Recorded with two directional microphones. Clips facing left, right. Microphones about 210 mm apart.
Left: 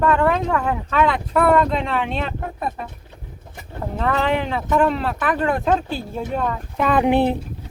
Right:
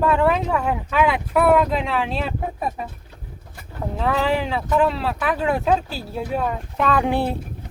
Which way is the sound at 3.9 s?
Centre (ahead or behind).